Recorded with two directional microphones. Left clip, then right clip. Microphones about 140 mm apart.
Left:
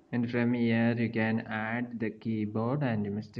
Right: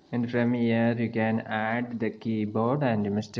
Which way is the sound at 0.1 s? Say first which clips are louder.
Right 3 dB; 30° right (ahead or behind).